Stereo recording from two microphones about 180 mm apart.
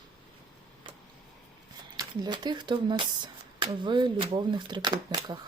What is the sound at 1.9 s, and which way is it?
Speech, 25° right (ahead or behind).